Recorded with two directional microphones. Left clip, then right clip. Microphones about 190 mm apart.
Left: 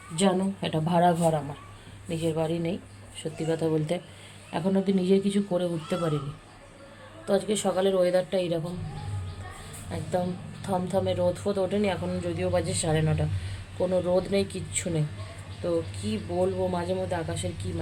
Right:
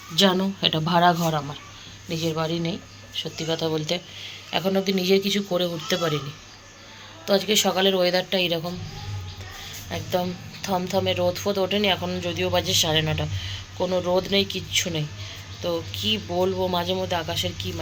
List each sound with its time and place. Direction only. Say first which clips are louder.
0.2 s speech: right 6 dB; 5° left (ahead or behind)
2.0 s speech: right 2 dB; 25° left (ahead or behind); by 6.1 s 5° left (ahead or behind)
7.3 s a woman's voice: right 5 dB; centre (ahead or behind)
9.9 s a woman's voice: right 3 dB; 5° left (ahead or behind)
13.7 s speech: right 2 dB; 10° right (ahead or behind)
14.2 s a woman's voice: right 4 dB; 10° left (ahead or behind)